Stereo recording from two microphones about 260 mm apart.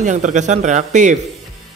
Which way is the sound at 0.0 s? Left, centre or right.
Right.